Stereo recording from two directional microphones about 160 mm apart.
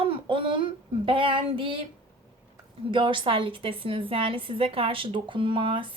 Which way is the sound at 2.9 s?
30° right (ahead or behind).